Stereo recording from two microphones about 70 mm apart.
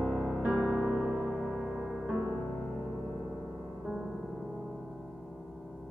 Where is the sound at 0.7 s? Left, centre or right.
Centre.